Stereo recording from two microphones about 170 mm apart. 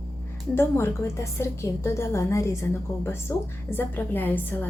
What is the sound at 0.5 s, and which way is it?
A woman's voice, 15° left (ahead or behind).